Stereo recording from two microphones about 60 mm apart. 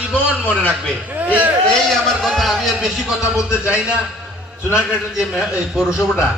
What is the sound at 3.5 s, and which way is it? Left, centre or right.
Speech, left.